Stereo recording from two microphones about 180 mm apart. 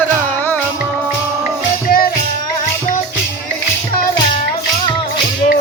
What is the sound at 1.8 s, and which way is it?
Music, 55° left (ahead or behind).